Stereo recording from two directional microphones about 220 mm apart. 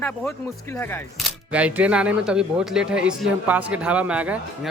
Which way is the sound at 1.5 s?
5° right (ahead or behind).